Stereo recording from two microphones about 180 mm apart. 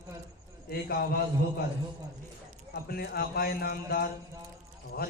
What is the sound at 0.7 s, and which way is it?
Speech, 55° left (ahead or behind).